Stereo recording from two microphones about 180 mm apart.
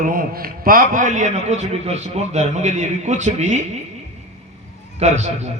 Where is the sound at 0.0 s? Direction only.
50° right (ahead or behind).